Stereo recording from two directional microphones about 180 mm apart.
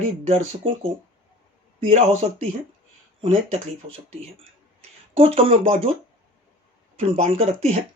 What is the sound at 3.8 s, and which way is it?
Speech, 30° right (ahead or behind).